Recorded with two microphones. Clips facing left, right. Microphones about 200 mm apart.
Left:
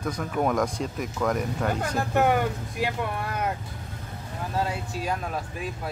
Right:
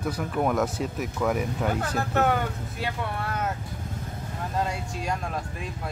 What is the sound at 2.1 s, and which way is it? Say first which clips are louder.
Speech: left 2 dB; 15° left (ahead or behind).